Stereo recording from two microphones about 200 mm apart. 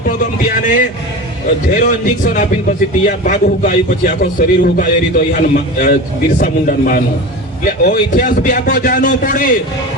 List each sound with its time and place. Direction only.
0.1 s a man's voice: 40° left (ahead or behind)